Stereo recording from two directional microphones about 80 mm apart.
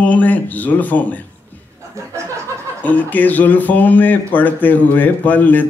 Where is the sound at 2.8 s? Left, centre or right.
Left.